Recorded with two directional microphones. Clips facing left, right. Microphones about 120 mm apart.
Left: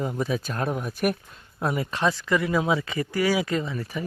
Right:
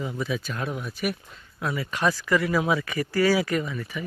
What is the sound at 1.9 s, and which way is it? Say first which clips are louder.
Speech: right 3 dB; 20° left (ahead or behind).